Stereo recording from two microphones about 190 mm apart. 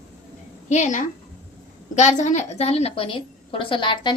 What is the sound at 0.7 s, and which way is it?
A woman's voice, 40° left (ahead or behind).